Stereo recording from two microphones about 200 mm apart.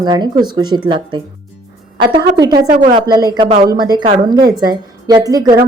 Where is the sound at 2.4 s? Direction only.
20° right (ahead or behind).